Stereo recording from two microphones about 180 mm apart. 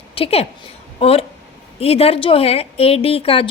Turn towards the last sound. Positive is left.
turn(degrees=30)  # may be behind; listen again after turning